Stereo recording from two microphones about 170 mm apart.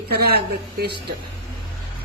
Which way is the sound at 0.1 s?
70° right (ahead or behind).